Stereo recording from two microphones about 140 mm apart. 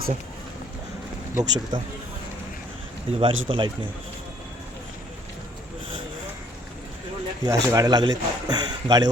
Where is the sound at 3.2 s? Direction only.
35° right (ahead or behind).